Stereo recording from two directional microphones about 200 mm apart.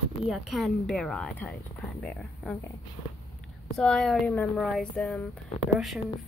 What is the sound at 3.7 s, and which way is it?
Speech, 5° left (ahead or behind).